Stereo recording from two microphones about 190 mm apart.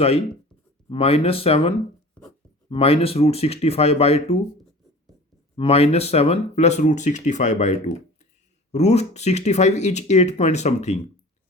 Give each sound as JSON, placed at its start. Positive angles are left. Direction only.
{"t": 0.9, "sound": "speech", "side_deg": 30}
{"t": 5.5, "sound": "speech", "side_deg": 30}